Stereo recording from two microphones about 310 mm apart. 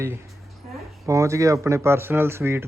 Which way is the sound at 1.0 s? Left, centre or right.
Centre.